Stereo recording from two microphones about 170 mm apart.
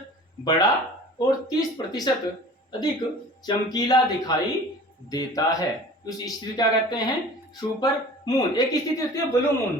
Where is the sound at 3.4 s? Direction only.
25° left (ahead or behind).